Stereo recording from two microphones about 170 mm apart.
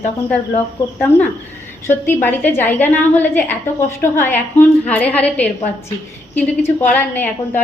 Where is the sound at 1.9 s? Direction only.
10° left (ahead or behind).